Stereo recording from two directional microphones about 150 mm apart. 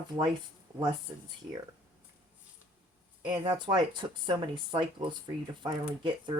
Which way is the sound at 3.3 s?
30° right (ahead or behind).